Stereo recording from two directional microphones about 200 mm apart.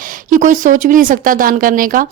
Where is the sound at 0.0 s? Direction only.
40° right (ahead or behind).